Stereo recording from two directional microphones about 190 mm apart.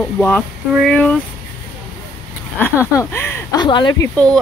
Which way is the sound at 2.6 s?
15° left (ahead or behind).